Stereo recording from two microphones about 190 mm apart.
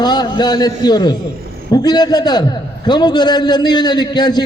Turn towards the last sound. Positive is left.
turn(degrees=20)  # may be behind; listen again after turning